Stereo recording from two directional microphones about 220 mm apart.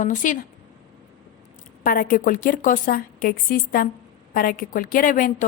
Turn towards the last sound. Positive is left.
turn(degrees=40)  # may be behind; listen again after turning